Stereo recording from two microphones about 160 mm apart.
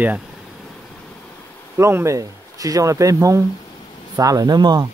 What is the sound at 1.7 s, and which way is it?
Speech, 15° right (ahead or behind).